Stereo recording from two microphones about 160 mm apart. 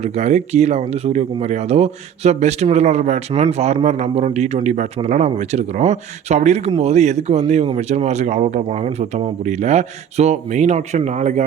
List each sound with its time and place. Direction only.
0.0 s speech: 45° right (ahead or behind)